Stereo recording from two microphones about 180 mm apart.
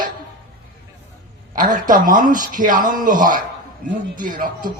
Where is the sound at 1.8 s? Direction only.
50° right (ahead or behind).